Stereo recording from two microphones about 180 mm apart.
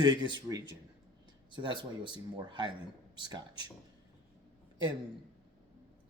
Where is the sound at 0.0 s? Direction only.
25° right (ahead or behind).